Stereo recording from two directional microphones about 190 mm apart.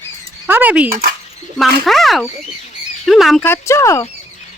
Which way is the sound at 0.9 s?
50° right (ahead or behind).